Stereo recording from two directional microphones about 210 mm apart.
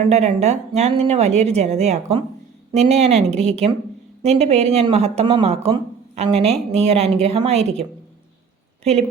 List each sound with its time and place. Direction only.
0.1 s a woman's voice: 30° right (ahead or behind)